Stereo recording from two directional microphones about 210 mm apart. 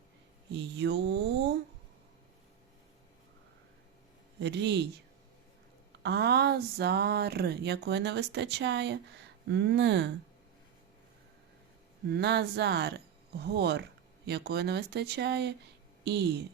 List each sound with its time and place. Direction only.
0.5 s speech: 55° right (ahead or behind)
4.4 s speech: 55° right (ahead or behind)
6.0 s speech: 50° right (ahead or behind)
12.0 s speech: 50° right (ahead or behind)